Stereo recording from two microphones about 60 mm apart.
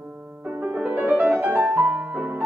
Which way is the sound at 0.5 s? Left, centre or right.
Right.